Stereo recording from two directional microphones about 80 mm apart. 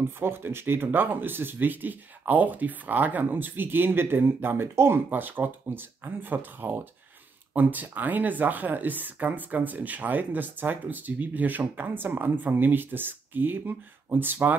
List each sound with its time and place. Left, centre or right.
0.2 s speech: right